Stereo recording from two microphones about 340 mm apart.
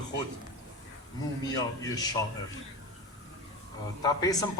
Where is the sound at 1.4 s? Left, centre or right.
Centre.